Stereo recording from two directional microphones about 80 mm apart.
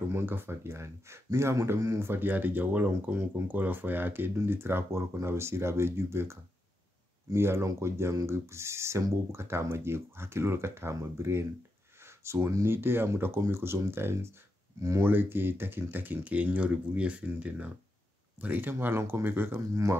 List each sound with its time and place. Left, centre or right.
0.1 s speech: right
7.3 s speech: right
15.0 s speech: right
19.7 s speech: right